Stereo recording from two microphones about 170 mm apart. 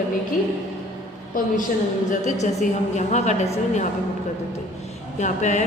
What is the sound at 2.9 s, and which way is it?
Speech, 45° left (ahead or behind).